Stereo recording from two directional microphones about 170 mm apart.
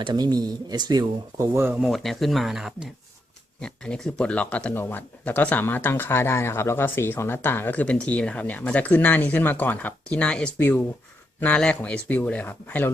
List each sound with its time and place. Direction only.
0.0 s speech: 25° right (ahead or behind)
1.8 s speech: centre (ahead or behind)